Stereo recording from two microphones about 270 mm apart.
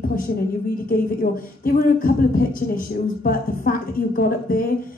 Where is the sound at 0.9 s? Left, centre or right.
Left.